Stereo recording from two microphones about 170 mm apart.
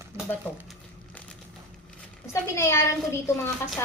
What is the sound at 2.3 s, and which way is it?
Speech, 15° left (ahead or behind).